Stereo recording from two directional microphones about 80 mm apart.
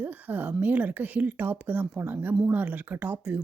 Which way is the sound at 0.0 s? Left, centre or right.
Right.